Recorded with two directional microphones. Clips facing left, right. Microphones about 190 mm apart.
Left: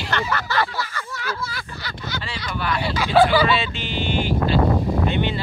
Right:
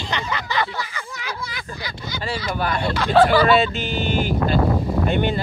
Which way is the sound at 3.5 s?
45° right (ahead or behind).